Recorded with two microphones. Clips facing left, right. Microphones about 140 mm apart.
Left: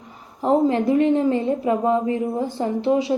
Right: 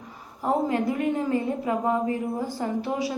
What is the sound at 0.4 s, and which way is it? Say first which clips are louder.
A woman's voice: left 6 dB; 25° left (ahead or behind).